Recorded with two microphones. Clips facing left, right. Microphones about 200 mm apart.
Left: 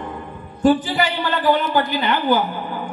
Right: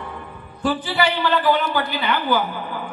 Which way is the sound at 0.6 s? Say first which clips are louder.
Left 5 dB; 45° left (ahead or behind).